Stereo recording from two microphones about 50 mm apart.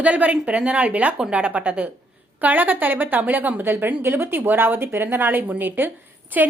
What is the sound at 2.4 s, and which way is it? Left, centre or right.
A woman's voice, right.